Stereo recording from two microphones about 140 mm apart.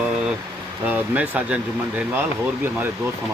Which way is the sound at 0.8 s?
10° right (ahead or behind).